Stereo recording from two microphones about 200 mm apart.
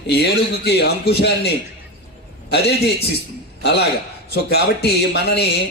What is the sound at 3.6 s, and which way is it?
A man's voice, 55° left (ahead or behind).